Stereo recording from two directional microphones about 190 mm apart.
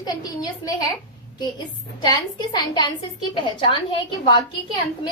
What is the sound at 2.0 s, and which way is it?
A woman's voice, 20° left (ahead or behind).